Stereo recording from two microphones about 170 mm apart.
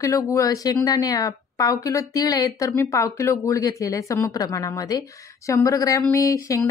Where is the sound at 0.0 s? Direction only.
20° left (ahead or behind).